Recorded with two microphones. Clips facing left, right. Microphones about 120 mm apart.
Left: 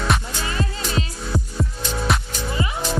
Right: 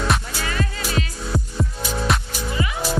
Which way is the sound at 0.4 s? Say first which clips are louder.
Right 1 dB; 25° left (ahead or behind).